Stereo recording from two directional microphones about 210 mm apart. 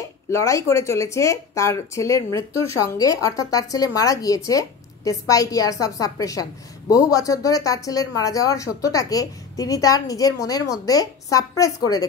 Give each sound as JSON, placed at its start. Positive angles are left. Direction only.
{"t": 0.3, "sound": "speech", "side_deg": 15}